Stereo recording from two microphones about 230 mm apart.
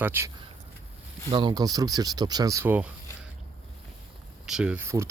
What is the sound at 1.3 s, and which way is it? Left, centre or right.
Speech, centre.